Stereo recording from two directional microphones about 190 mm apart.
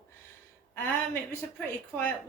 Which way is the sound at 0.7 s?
10° left (ahead or behind).